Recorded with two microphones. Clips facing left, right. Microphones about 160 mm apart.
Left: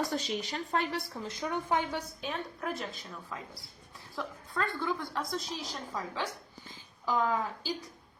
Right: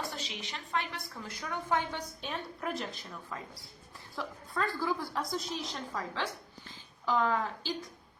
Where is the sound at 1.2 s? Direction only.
20° left (ahead or behind).